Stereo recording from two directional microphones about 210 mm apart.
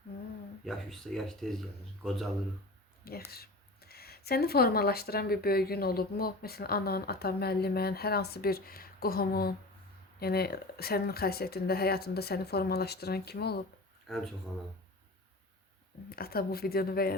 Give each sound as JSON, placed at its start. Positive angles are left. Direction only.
{"t": 0.6, "sound": "speech", "side_deg": 0}
{"t": 3.0, "sound": "speech", "side_deg": 45}
{"t": 14.1, "sound": "speech", "side_deg": 0}
{"t": 16.0, "sound": "speech", "side_deg": 45}